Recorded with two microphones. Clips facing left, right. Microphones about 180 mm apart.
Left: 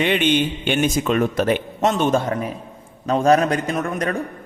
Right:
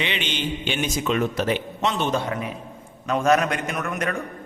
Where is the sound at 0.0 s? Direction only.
50° left (ahead or behind).